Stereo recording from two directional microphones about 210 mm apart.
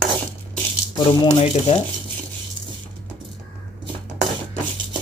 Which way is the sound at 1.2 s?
30° left (ahead or behind).